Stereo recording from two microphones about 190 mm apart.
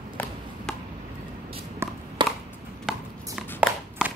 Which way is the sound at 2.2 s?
25° right (ahead or behind).